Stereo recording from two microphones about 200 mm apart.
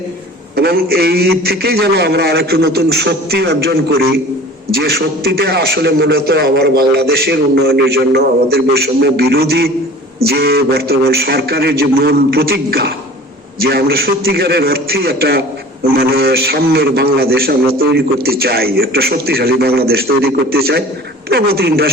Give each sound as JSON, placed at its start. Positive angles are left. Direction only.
{"t": 0.5, "sound": "a man's voice", "side_deg": -50}